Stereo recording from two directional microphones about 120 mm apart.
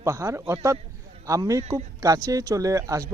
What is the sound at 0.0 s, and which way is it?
Speech, 25° right (ahead or behind).